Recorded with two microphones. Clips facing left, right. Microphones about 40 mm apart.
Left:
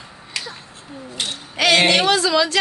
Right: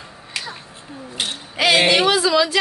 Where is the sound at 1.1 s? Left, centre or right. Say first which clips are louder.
Right 1 dB; centre.